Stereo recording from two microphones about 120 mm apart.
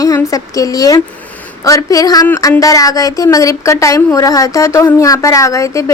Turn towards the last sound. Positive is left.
turn(degrees=25)  # may be behind; listen again after turning